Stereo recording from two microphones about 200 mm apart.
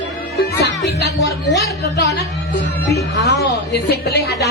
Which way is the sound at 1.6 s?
50° left (ahead or behind).